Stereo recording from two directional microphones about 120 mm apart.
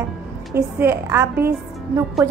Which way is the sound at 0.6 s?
20° right (ahead or behind).